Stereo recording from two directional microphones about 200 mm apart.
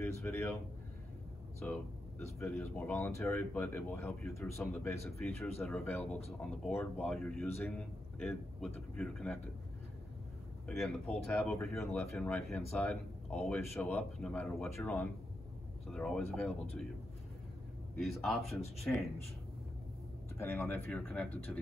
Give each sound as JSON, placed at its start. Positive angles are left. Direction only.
{"t": 0.0, "sound": "speech", "side_deg": 15}
{"t": 1.6, "sound": "speech", "side_deg": 5}
{"t": 5.2, "sound": "speech", "side_deg": 0}
{"t": 10.8, "sound": "speech", "side_deg": 5}
{"t": 18.0, "sound": "speech", "side_deg": 0}
{"t": 20.3, "sound": "speech", "side_deg": 10}